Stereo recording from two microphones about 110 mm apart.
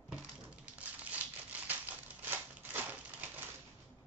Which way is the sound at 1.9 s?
15° right (ahead or behind).